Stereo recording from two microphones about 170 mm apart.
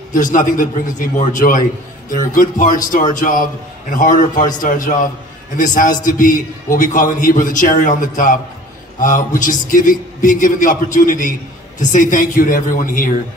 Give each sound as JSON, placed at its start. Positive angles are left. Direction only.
{"t": 0.1, "sound": "a man's voice", "side_deg": 50}